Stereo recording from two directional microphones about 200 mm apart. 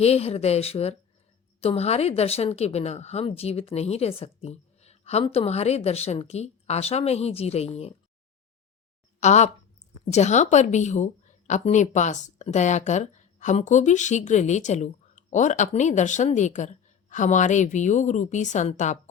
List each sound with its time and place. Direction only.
0.0 s a woman's voice: 30° left (ahead or behind)
9.2 s a woman's voice: 35° left (ahead or behind)